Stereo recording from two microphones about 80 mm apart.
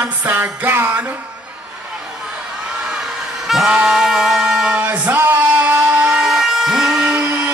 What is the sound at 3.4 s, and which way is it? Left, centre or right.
Music, centre.